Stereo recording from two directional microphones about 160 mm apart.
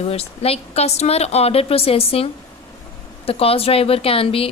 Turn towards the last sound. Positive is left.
turn(degrees=35)  # may be behind; listen again after turning